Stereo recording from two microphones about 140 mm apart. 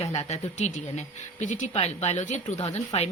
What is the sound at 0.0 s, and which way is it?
Speech, 50° left (ahead or behind).